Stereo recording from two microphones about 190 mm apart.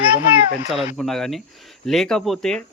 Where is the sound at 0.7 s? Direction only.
35° left (ahead or behind).